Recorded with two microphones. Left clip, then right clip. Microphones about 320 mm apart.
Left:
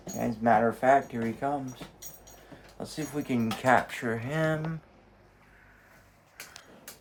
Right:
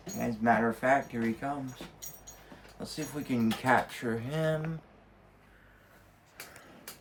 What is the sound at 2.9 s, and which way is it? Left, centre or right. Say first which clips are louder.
Speech: left 3 dB; centre.